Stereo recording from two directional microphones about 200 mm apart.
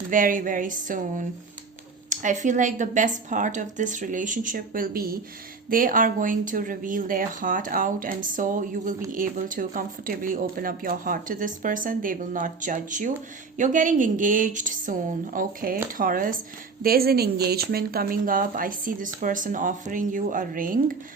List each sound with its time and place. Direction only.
0.1 s speech: 40° right (ahead or behind)